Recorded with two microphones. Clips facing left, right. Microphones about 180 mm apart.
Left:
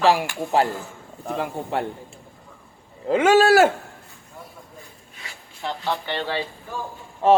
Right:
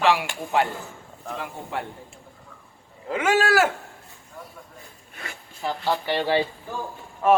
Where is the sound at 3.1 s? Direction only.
30° left (ahead or behind).